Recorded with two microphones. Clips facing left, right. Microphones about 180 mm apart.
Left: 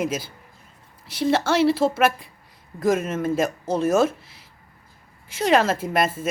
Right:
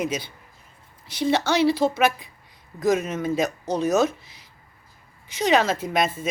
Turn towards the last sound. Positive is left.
turn(degrees=5)  # may be behind; listen again after turning